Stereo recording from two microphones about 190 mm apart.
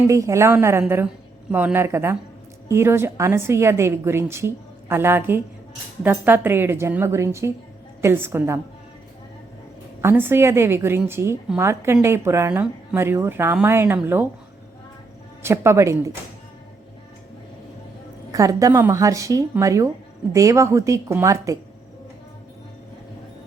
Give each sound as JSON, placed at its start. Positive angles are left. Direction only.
{"t": 0.1, "sound": "a woman's voice", "side_deg": -15}
{"t": 10.0, "sound": "a woman's voice", "side_deg": -10}
{"t": 15.4, "sound": "a woman's voice", "side_deg": -15}
{"t": 18.3, "sound": "a woman's voice", "side_deg": -15}